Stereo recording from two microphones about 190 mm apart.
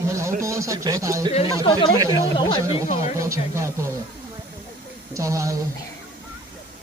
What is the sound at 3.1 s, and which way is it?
Speech, 15° right (ahead or behind).